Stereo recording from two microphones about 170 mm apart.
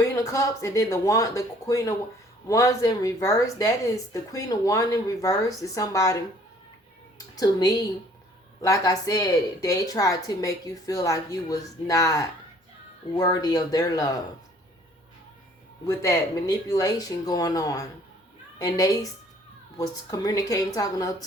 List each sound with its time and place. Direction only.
0.2 s speech: 20° left (ahead or behind)
7.3 s speech: 20° left (ahead or behind)
15.9 s speech: 20° left (ahead or behind)